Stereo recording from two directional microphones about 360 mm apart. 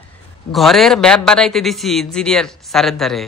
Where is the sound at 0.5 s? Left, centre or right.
Centre.